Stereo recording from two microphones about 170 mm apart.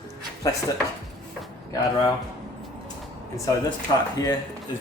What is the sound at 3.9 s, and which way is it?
Speech, 25° left (ahead or behind).